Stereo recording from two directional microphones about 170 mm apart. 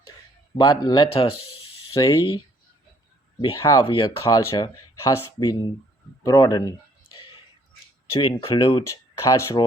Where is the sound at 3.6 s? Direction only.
20° left (ahead or behind).